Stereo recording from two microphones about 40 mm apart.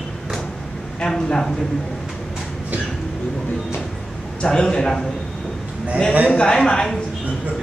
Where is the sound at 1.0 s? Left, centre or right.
Centre.